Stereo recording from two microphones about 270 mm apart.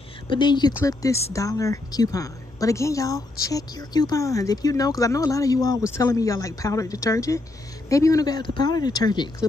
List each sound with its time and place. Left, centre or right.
0.3 s a woman's voice: centre